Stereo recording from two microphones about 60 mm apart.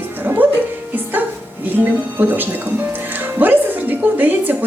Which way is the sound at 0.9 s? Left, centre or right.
Right.